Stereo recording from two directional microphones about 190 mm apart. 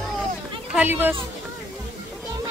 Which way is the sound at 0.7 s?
10° right (ahead or behind).